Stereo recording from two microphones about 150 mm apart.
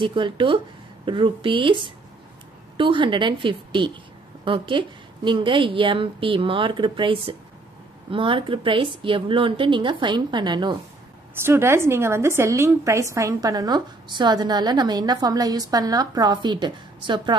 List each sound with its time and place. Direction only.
0.0 s a woman's voice: 35° right (ahead or behind)
11.4 s a woman's voice: 15° right (ahead or behind)